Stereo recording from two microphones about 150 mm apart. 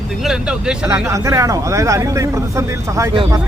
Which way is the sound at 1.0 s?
20° right (ahead or behind).